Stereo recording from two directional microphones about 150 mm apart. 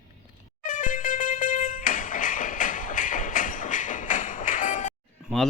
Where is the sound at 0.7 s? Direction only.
60° left (ahead or behind).